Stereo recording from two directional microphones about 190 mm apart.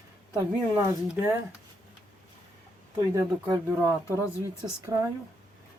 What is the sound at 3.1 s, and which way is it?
Speech, 15° right (ahead or behind).